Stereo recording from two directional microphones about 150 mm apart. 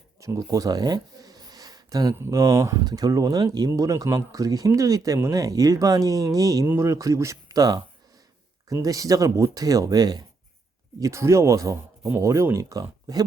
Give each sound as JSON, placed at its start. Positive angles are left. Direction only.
{"t": 0.2, "sound": "speech", "side_deg": -20}